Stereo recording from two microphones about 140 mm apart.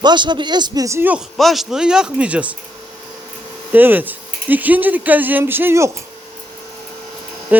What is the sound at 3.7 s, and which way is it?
Speech, 15° right (ahead or behind).